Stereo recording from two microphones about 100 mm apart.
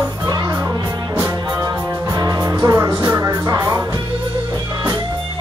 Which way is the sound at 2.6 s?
25° right (ahead or behind).